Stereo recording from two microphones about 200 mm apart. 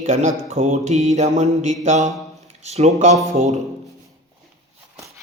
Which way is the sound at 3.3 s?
35° right (ahead or behind).